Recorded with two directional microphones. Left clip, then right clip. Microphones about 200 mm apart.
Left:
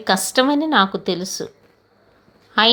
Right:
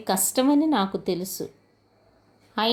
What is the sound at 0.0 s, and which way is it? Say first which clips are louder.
A woman's voice: left 6 dB; 10° left (ahead or behind).